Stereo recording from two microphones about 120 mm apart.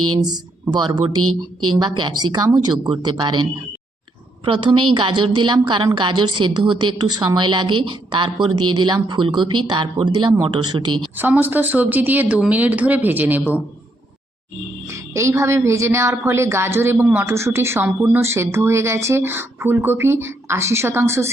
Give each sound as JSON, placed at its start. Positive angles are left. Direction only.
{"t": 0.2, "sound": "a woman's voice", "side_deg": -35}
{"t": 4.4, "sound": "a woman's voice", "side_deg": -45}
{"t": 11.2, "sound": "a woman's voice", "side_deg": -15}
{"t": 14.8, "sound": "speech", "side_deg": -25}